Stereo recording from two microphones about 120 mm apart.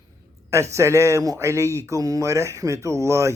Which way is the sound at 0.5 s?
25° right (ahead or behind).